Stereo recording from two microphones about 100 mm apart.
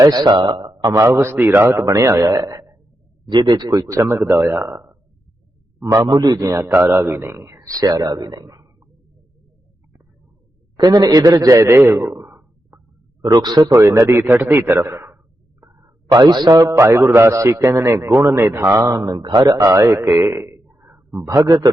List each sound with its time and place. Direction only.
0.0 s speech: 40° right (ahead or behind)
0.5 s a sound: 45° right (ahead or behind)
0.9 s a man's voice: 30° right (ahead or behind)
3.2 s a man's voice: 45° right (ahead or behind); by 4.9 s 25° right (ahead or behind)
5.8 s a man's voice: 35° right (ahead or behind)
10.8 s a man's voice: 40° right (ahead or behind); by 12.8 s 20° right (ahead or behind)
13.2 s speech: 40° right (ahead or behind)
13.7 s a man's voice: 25° right (ahead or behind)
15.6 s a man's voice: 40° right (ahead or behind); by 21.2 s 20° right (ahead or behind)
21.2 s a man's voice: 35° right (ahead or behind)